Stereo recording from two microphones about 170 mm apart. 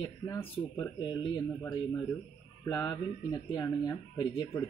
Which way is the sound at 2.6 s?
25° left (ahead or behind).